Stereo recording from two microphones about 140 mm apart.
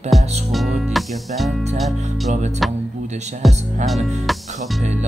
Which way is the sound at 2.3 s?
55° right (ahead or behind).